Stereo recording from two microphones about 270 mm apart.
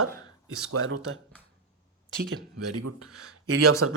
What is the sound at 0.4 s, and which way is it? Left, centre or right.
Speech, right.